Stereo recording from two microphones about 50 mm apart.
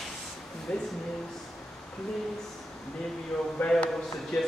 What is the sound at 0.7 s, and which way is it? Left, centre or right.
Speech, centre.